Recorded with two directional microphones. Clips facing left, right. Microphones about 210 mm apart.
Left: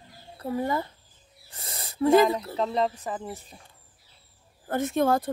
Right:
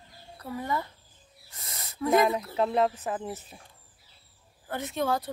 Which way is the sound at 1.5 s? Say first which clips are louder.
Left 4 dB; 30° left (ahead or behind).